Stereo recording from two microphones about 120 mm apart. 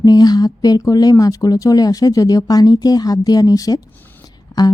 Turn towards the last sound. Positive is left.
turn(degrees=30)  # may be behind; listen again after turning